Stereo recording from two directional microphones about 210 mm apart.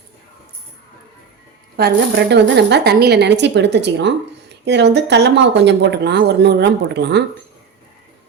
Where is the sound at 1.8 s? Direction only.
50° right (ahead or behind).